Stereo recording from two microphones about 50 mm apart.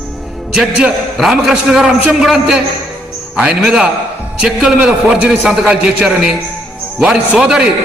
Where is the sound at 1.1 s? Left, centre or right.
Centre.